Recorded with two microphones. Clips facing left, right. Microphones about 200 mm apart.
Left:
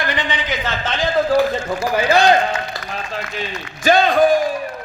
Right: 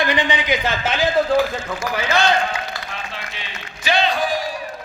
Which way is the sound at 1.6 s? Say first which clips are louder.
Left 6 dB; 30° left (ahead or behind).